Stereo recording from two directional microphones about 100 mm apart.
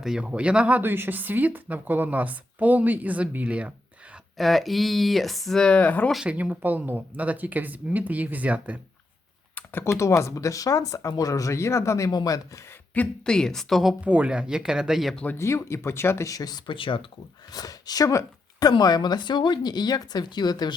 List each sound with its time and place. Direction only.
0.0 s speech: 10° right (ahead or behind)
4.4 s speech: centre (ahead or behind)
6.2 s speech: 15° right (ahead or behind)
9.6 s computer keyboard: 20° left (ahead or behind)
10.0 s speech: 30° left (ahead or behind)
12.9 s speech: 10° left (ahead or behind)
14.0 s speech: 15° right (ahead or behind)
15.1 s speech: 15° left (ahead or behind)
15.4 s speech: 30° left (ahead or behind); by 17.1 s 60° left (ahead or behind)
17.5 s speech: 40° left (ahead or behind)